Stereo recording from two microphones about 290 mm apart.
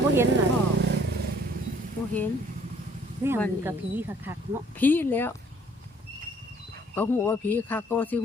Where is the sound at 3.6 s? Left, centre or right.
Centre.